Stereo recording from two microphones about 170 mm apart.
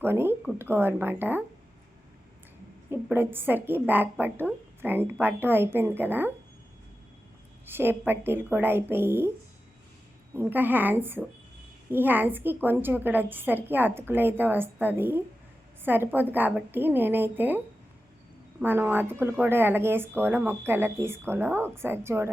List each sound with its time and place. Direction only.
0.0 s speech: 15° right (ahead or behind)
2.9 s speech: 10° right (ahead or behind)
7.6 s speech: 15° right (ahead or behind)
10.3 s speech: 10° right (ahead or behind)
18.6 s speech: 10° right (ahead or behind)